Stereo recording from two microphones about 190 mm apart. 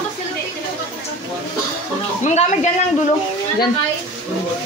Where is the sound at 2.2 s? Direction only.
40° left (ahead or behind).